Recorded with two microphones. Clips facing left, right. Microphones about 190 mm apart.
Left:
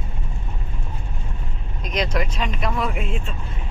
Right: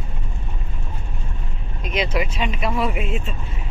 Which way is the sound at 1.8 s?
5° right (ahead or behind).